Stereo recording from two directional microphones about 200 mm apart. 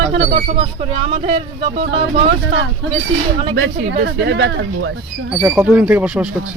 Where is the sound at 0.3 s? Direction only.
30° right (ahead or behind).